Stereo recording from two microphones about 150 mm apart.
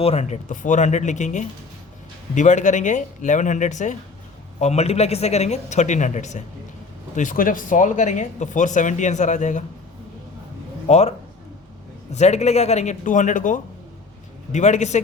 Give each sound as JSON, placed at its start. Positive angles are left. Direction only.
{"t": 0.0, "sound": "a man's voice", "side_deg": 45}
{"t": 7.2, "sound": "speech", "side_deg": 65}
{"t": 10.8, "sound": "a man's voice", "side_deg": 50}
{"t": 12.1, "sound": "a man's voice", "side_deg": 50}